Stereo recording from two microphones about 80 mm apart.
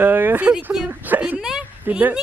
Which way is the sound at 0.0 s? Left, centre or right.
Right.